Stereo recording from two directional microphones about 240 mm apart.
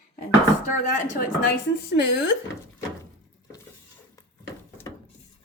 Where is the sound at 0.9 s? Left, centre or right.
Left.